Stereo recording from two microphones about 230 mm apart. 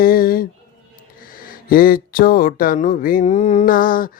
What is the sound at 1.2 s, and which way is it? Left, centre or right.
Speech, left.